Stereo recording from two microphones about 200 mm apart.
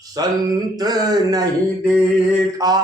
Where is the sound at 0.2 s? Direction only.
20° right (ahead or behind).